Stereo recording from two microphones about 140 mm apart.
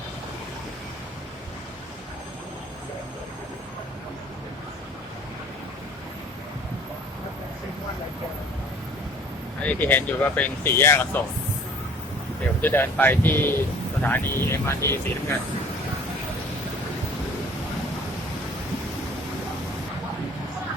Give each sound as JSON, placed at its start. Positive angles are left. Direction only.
{"t": 9.6, "sound": "speech", "side_deg": 15}
{"t": 12.6, "sound": "speech", "side_deg": 15}